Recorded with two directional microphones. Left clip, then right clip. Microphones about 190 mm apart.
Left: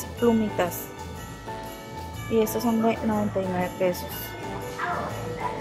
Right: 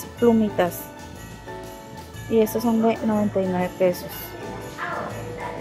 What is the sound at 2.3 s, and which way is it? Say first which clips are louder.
Speech: right 3 dB; 5° left (ahead or behind).